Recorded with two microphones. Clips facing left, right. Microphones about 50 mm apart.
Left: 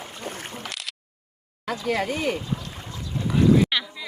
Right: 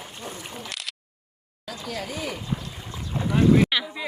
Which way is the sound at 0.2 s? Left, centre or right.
Left.